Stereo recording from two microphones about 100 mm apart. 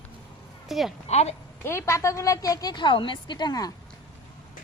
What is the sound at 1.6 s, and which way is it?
A woman's voice, 25° left (ahead or behind).